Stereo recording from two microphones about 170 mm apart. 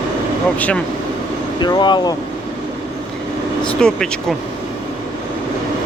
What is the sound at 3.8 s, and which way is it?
Speech, 5° left (ahead or behind).